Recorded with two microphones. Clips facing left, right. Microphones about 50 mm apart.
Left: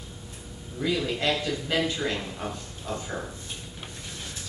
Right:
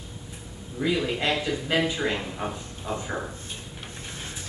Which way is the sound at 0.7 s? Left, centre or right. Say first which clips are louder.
Right 2 dB; centre.